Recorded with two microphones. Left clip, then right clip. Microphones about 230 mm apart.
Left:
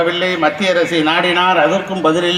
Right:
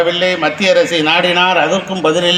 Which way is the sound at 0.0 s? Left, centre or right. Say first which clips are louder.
Right 1 dB; right.